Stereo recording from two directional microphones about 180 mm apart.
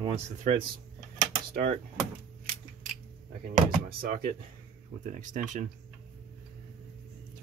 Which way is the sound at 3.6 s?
50° right (ahead or behind).